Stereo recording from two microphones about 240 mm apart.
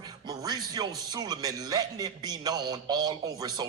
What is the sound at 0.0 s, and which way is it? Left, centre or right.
Speech, centre.